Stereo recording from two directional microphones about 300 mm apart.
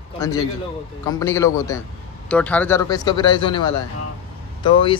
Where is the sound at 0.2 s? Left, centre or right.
Centre.